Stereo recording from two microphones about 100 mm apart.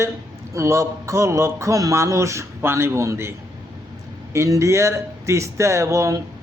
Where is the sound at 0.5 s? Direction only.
30° right (ahead or behind).